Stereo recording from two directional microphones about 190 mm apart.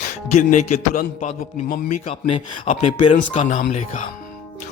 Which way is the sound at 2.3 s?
30° left (ahead or behind).